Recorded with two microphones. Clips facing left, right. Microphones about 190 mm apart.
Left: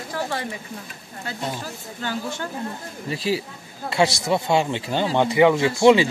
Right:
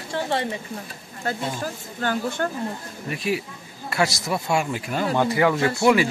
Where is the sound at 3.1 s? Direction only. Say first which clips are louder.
Left 1 dB; 30° left (ahead or behind).